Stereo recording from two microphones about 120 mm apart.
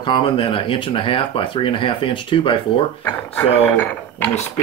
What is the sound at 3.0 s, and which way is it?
Speech, 20° left (ahead or behind).